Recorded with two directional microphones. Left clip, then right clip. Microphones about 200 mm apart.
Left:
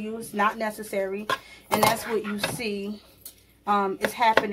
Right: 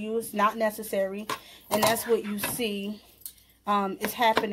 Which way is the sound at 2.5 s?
45° right (ahead or behind).